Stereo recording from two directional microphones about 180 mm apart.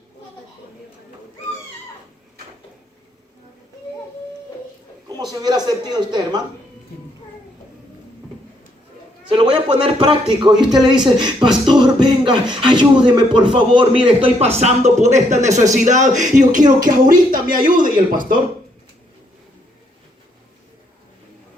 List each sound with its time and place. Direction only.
5.1 s speech: 20° right (ahead or behind)
9.3 s a man's voice: 30° right (ahead or behind); by 18.3 s 50° right (ahead or behind)